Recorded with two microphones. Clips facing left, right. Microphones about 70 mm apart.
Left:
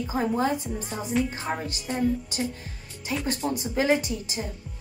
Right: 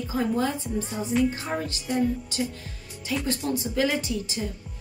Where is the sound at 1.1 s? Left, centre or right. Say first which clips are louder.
Right 3 dB; centre.